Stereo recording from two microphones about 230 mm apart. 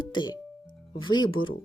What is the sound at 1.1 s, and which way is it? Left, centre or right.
Speech, left.